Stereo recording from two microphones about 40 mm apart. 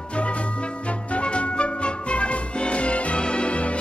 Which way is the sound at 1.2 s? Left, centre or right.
Left.